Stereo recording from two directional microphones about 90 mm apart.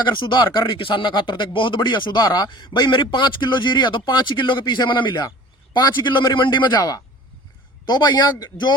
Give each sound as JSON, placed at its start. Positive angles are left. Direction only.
{"t": 0.0, "sound": "a man's voice", "side_deg": 60}